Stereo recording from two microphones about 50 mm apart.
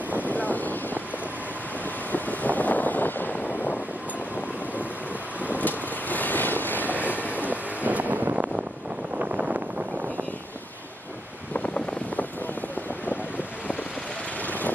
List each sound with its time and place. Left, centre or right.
0.2 s vehicle: left
2.1 s vehicle: left
5.6 s vehicle: left
7.2 s vehicle: right
9.1 s a sound: right
11.5 s wind: left